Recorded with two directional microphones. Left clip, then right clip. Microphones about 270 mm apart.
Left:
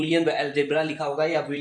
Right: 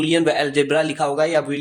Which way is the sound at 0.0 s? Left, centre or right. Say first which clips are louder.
Right 5 dB; right.